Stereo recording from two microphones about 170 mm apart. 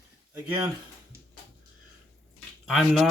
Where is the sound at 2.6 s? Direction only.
Centre (ahead or behind).